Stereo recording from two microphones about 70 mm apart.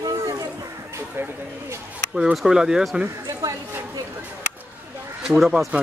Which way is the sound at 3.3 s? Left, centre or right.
Right.